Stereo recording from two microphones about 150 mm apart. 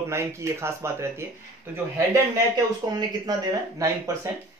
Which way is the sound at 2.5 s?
25° right (ahead or behind).